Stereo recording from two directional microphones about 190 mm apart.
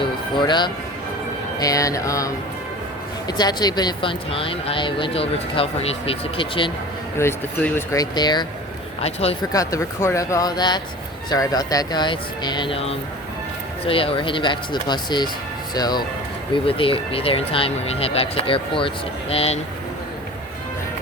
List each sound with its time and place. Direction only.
0.3 s speech: 25° left (ahead or behind)
7.2 s speech: 10° left (ahead or behind); by 9.3 s 30° left (ahead or behind)
9.5 s speech: 15° left (ahead or behind)